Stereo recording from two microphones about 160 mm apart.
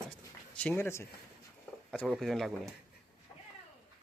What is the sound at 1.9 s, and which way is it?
Speech, centre (ahead or behind).